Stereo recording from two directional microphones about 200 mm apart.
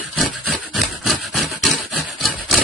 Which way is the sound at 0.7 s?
Centre (ahead or behind).